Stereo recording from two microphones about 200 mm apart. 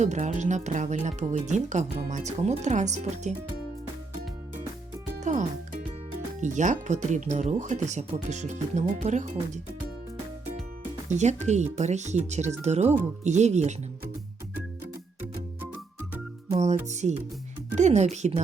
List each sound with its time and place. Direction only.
0.0 s speech: 35° right (ahead or behind)
5.2 s music: 40° right (ahead or behind)
6.4 s speech: 40° right (ahead or behind)
11.1 s speech: 35° right (ahead or behind)
16.5 s speech: 35° right (ahead or behind)